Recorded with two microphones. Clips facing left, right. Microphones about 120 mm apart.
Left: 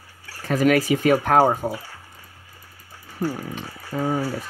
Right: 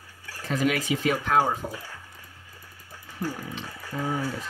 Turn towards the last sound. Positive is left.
turn(degrees=50)  # may be behind; listen again after turning